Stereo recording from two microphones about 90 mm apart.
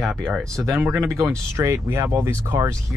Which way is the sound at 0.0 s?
5° left (ahead or behind).